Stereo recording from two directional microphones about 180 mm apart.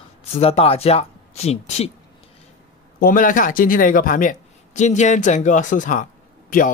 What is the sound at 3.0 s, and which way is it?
Speech, 50° left (ahead or behind).